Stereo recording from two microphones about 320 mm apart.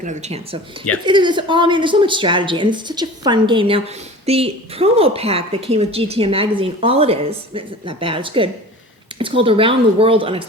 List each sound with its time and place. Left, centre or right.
0.0 s a woman's voice: right